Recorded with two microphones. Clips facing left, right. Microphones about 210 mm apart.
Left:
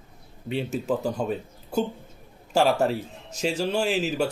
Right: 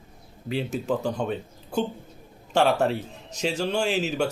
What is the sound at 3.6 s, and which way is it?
Speech, 5° left (ahead or behind).